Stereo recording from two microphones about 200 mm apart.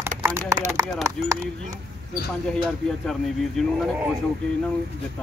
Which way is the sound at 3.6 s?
5° left (ahead or behind).